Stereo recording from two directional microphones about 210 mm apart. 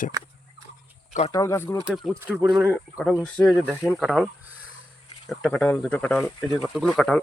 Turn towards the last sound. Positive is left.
turn(degrees=0)  # may be behind; listen again after turning